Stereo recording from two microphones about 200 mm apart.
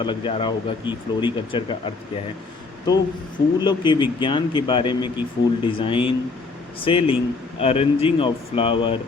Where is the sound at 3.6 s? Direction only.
20° left (ahead or behind).